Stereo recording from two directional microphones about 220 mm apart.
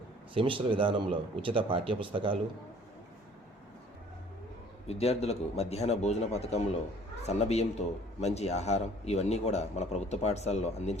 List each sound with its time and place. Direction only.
0.3 s speech: 25° right (ahead or behind)
4.9 s a man's voice: 30° left (ahead or behind)